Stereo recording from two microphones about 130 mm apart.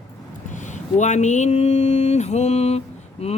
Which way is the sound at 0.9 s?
65° left (ahead or behind).